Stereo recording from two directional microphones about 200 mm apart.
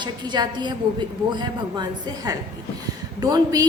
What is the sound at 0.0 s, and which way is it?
A woman's voice, 20° right (ahead or behind).